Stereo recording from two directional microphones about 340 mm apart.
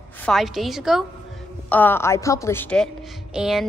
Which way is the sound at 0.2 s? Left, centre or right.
Centre.